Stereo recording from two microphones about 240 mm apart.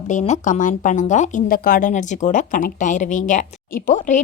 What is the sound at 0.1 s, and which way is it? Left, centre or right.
Speech, left.